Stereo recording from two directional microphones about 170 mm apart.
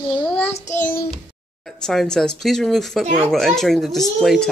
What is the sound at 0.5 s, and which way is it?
Child singing, 45° left (ahead or behind).